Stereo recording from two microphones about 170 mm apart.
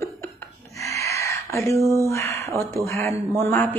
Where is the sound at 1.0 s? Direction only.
15° left (ahead or behind).